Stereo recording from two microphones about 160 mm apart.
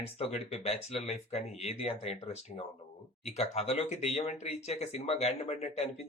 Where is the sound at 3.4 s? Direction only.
40° left (ahead or behind).